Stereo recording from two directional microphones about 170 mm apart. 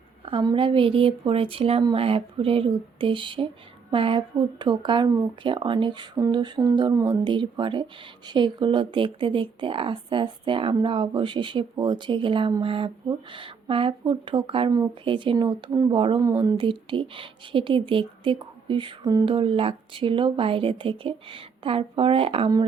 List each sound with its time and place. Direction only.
0.3 s speech: 30° right (ahead or behind)
16.2 s speech: 20° right (ahead or behind)